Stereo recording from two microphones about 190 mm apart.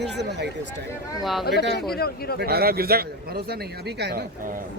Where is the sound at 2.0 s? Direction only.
55° left (ahead or behind).